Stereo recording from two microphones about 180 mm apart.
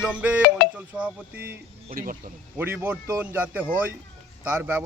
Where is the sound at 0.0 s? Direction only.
5° right (ahead or behind).